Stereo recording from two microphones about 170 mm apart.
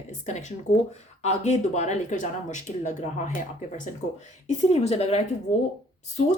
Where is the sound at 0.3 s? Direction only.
40° left (ahead or behind).